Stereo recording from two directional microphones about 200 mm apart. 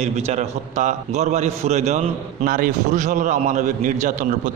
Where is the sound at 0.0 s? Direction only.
35° right (ahead or behind).